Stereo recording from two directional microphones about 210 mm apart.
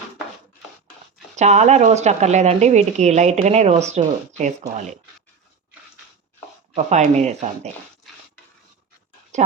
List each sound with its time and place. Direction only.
1.4 s a woman's voice: 35° right (ahead or behind)
6.7 s a woman's voice: 35° right (ahead or behind)
9.3 s a sound: 35° right (ahead or behind)